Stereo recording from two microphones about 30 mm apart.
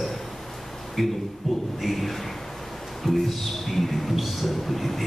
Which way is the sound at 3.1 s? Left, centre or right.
Centre.